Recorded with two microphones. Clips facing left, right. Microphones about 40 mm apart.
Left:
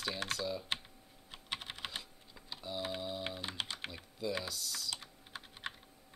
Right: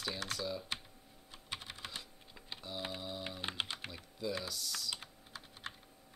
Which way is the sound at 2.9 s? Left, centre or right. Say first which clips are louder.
Left 3 dB; centre.